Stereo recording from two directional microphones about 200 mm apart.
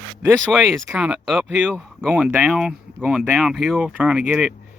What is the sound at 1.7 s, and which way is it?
Speech, 5° left (ahead or behind).